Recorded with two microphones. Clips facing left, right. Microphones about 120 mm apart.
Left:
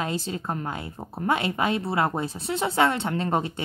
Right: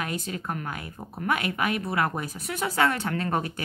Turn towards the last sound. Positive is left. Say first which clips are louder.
# left 2 dB
turn(degrees=25)  # may be behind; listen again after turning